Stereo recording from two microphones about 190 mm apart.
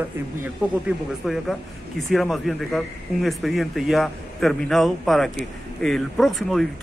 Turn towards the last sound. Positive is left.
turn(degrees=0)  # may be behind; listen again after turning